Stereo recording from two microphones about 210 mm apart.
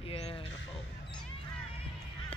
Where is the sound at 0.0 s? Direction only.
25° left (ahead or behind).